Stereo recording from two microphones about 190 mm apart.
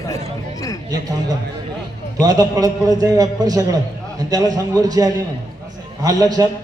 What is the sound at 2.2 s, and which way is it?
A man's voice, 20° right (ahead or behind).